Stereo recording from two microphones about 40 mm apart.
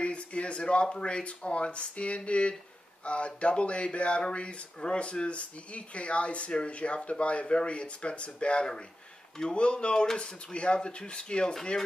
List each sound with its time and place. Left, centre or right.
0.0 s speech: left